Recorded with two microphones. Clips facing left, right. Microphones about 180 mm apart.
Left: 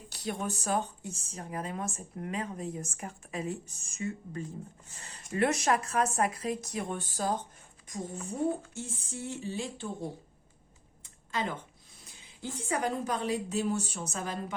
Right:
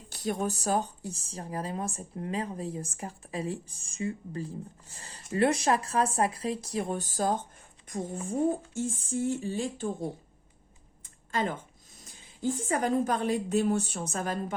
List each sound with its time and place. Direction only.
0.1 s a woman's voice: 45° right (ahead or behind)
11.0 s speech: 45° right (ahead or behind)